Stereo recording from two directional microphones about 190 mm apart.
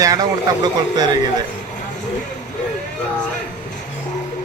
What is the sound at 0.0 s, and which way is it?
A man's voice, 20° right (ahead or behind).